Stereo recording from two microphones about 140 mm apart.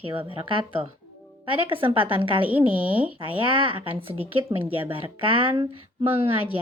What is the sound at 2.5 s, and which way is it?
Speech, 10° right (ahead or behind).